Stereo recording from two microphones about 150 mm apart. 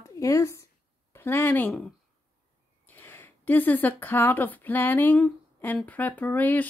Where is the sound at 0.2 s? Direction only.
20° left (ahead or behind).